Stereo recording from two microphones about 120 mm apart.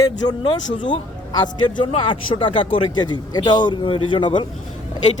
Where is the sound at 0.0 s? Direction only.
40° left (ahead or behind).